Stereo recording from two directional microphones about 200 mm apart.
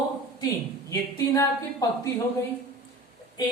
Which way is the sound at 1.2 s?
15° left (ahead or behind).